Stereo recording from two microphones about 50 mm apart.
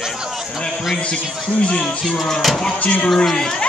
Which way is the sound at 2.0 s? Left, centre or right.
Centre.